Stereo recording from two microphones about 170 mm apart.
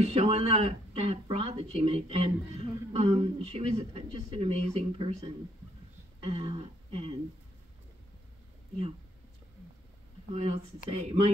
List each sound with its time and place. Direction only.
0.1 s speech: 35° right (ahead or behind)
10.3 s speech: 35° right (ahead or behind)